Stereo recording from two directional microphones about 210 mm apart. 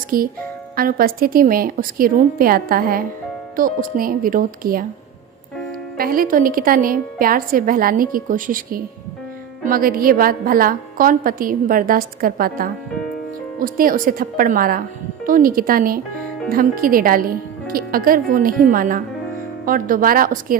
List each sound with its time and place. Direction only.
0.1 s a woman's voice: 45° right (ahead or behind)
6.0 s a woman's voice: 45° right (ahead or behind)